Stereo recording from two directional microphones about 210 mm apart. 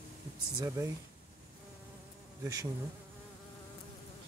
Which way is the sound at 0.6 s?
15° right (ahead or behind).